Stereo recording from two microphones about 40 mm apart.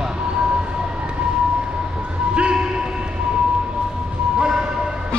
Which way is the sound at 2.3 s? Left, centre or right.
Right.